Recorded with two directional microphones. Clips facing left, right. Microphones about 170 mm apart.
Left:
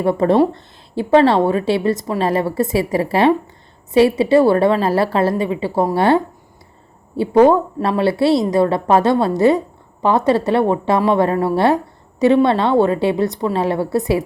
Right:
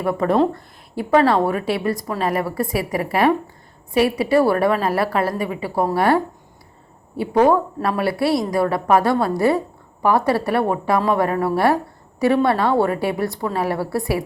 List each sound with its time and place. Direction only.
0.0 s a woman's voice: 30° left (ahead or behind)